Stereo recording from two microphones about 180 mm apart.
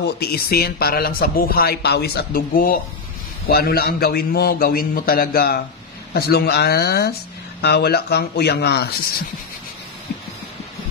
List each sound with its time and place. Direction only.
0.0 s a man's voice: 60° left (ahead or behind)